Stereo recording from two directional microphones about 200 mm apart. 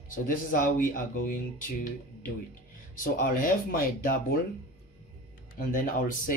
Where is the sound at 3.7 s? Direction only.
45° left (ahead or behind).